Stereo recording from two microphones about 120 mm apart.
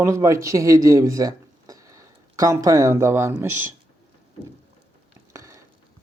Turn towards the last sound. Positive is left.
turn(degrees=-25)  # may be behind; listen again after turning